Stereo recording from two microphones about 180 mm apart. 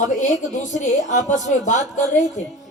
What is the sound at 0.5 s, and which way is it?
Speech, 40° left (ahead or behind).